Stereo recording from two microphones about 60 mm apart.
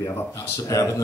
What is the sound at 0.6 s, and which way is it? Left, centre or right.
Speech, left.